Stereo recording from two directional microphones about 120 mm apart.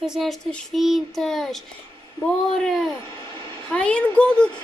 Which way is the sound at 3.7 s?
10° left (ahead or behind).